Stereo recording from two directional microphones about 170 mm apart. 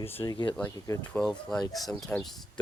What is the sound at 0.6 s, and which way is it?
Speech, 15° left (ahead or behind).